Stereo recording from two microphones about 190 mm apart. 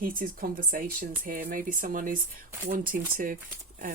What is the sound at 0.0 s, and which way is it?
Speech, 45° right (ahead or behind).